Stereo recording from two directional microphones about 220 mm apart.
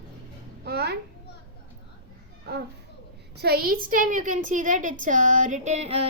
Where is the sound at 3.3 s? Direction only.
45° right (ahead or behind); by 6.0 s 30° right (ahead or behind).